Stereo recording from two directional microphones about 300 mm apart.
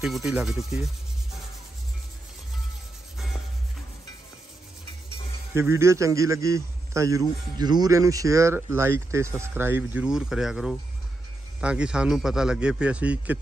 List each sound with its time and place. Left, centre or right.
0.0 s a man's voice: centre
5.5 s a man's voice: centre